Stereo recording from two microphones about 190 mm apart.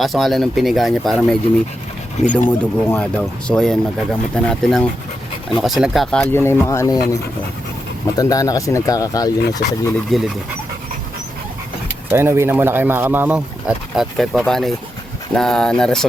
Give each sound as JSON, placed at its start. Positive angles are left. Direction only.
{"t": 0.0, "sound": "speech", "side_deg": 0}
{"t": 2.5, "sound": "speech", "side_deg": 10}
{"t": 8.1, "sound": "speech", "side_deg": 20}
{"t": 9.6, "sound": "speech", "side_deg": 55}
{"t": 10.1, "sound": "speech", "side_deg": 0}
{"t": 12.1, "sound": "speech", "side_deg": -15}